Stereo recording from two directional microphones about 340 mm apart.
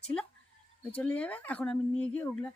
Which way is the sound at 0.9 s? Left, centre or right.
Centre.